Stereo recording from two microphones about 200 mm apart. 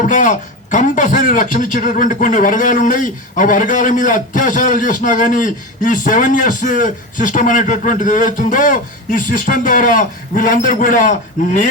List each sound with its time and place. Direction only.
0.0 s a man's voice: 40° left (ahead or behind)